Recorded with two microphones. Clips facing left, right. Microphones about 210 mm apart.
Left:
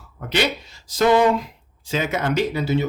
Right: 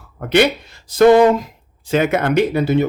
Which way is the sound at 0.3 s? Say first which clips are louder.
Right 8 dB; 55° right (ahead or behind).